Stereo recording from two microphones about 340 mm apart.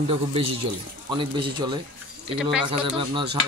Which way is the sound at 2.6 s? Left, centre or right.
Centre.